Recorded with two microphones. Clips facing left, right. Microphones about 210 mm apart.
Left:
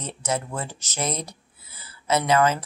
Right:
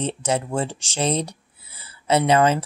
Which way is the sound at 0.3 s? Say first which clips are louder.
Right 4 dB; 30° right (ahead or behind).